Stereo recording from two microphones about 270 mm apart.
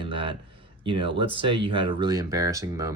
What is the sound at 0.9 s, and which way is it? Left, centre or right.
Speech, centre.